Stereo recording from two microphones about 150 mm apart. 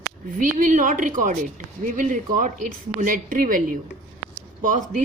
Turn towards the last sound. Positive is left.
turn(degrees=-60)  # may be behind; listen again after turning